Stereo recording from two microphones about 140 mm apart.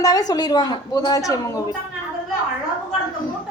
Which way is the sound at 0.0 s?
25° left (ahead or behind).